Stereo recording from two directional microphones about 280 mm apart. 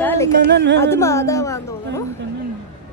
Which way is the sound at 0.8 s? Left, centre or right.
Centre.